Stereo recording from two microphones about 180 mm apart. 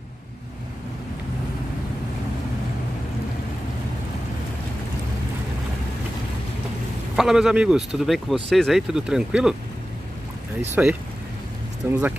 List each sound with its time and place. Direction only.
7.2 s speech: centre (ahead or behind)
10.7 s speech: 10° right (ahead or behind)